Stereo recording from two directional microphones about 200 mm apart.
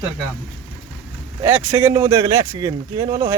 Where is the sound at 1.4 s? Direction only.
10° right (ahead or behind).